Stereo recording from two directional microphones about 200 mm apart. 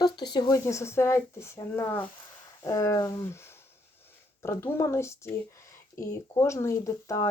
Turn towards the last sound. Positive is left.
turn(degrees=15)  # may be behind; listen again after turning